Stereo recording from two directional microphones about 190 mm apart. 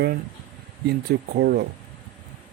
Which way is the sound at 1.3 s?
55° right (ahead or behind).